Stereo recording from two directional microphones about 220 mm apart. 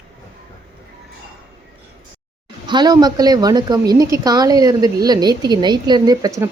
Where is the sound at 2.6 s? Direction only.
20° right (ahead or behind).